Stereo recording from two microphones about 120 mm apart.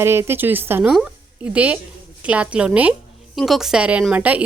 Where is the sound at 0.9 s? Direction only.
5° right (ahead or behind).